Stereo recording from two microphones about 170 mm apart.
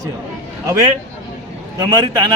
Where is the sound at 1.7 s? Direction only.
25° right (ahead or behind).